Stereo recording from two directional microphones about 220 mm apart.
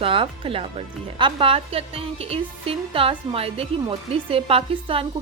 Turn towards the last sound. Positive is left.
turn(degrees=-25)  # may be behind; listen again after turning